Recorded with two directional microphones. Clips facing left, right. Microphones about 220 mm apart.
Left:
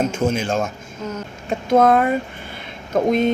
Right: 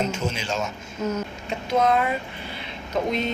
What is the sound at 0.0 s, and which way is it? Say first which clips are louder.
Speech: left 7 dB; 50° left (ahead or behind).